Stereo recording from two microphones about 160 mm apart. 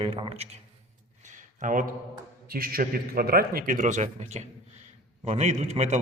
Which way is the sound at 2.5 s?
65° right (ahead or behind).